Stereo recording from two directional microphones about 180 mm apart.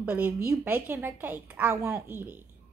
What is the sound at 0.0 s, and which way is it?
A woman's voice, 10° right (ahead or behind).